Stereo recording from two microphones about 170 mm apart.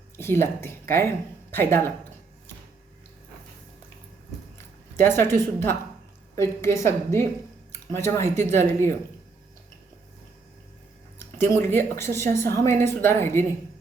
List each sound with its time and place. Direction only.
0.2 s speech: 15° left (ahead or behind)
4.5 s a woman's voice: 15° left (ahead or behind)
11.3 s a woman's voice: 15° left (ahead or behind)